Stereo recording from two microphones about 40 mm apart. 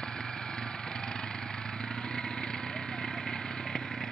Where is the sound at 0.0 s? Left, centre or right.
Centre.